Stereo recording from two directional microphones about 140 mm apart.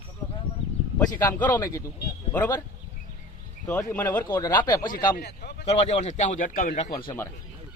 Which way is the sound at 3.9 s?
15° left (ahead or behind).